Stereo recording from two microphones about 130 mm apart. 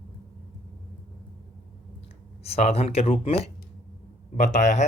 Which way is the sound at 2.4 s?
55° left (ahead or behind).